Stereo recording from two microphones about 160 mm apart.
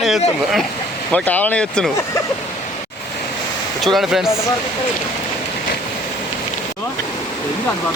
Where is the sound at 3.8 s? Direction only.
Centre (ahead or behind).